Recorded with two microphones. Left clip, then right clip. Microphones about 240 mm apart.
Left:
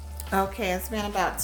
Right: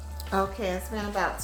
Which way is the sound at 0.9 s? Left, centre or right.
Left.